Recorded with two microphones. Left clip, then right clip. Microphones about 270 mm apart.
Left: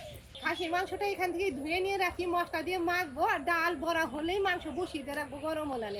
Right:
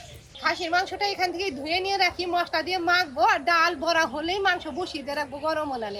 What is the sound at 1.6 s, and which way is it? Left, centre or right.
A woman's voice, centre.